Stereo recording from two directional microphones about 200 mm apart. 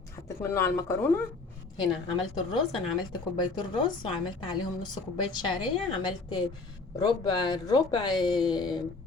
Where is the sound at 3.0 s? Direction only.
20° left (ahead or behind).